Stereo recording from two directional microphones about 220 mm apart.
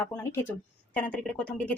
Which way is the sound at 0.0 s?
10° left (ahead or behind).